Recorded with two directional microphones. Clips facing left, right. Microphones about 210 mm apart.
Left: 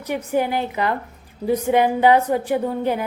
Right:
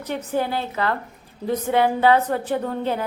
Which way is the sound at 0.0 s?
10° left (ahead or behind).